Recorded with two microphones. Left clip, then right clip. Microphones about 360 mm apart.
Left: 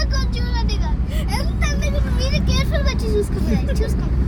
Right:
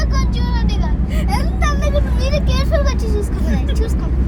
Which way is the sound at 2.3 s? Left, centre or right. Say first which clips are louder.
Right 5 dB; right.